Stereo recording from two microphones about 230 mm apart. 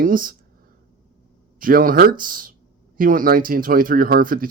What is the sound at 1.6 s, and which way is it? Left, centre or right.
Speech, right.